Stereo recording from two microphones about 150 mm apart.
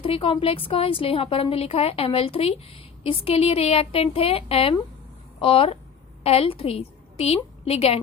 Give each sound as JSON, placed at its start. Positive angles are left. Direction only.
{"t": 0.0, "sound": "a woman's voice", "side_deg": 35}